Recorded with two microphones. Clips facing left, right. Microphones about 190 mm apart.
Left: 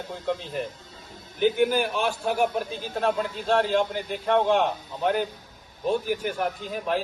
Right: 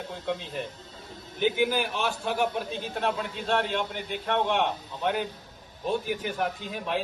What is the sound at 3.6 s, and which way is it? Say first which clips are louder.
Speech: left 6 dB; 35° left (ahead or behind).